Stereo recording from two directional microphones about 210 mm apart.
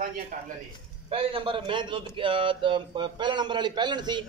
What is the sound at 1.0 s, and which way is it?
A man's voice, 25° right (ahead or behind).